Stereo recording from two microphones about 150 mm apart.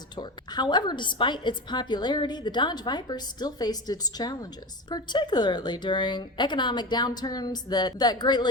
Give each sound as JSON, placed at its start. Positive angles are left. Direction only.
{"t": 0.2, "sound": "a woman's voice", "side_deg": 30}